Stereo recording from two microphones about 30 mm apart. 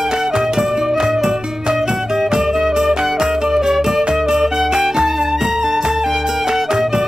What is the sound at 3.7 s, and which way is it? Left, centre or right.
Music, centre.